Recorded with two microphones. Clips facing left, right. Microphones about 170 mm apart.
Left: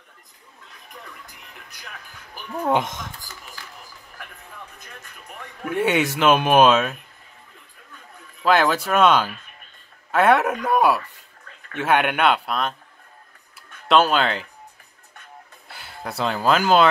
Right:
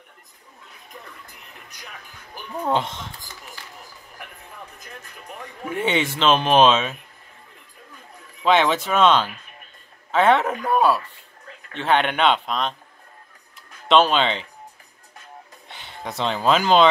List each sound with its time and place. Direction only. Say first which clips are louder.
2.5 s speech: left 2 dB; 10° left (ahead or behind)
5.7 s a man's voice: left 2 dB; 5° left (ahead or behind)
8.5 s a man's voice: even; 5° left (ahead or behind)
13.6 s music: right 1 dB; 5° left (ahead or behind)
15.7 s speech: even; 5° left (ahead or behind)